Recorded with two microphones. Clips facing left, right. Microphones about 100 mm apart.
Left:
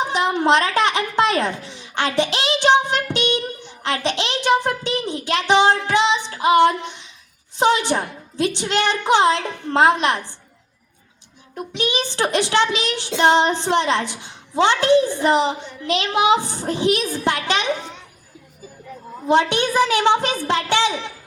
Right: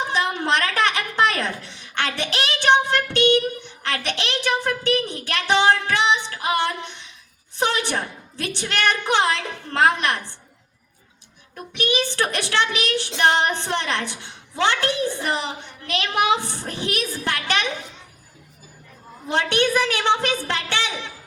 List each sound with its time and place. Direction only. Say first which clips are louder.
0.0 s a sound: left 4 dB; 20° left (ahead or behind)
3.8 s child singing: left 4 dB; 20° left (ahead or behind)
11.5 s child singing: left 1 dB; 20° left (ahead or behind)
19.3 s a woman's voice: left 3 dB; 15° left (ahead or behind)